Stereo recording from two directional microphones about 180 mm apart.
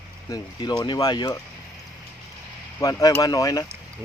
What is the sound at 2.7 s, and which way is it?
Speech, 20° left (ahead or behind).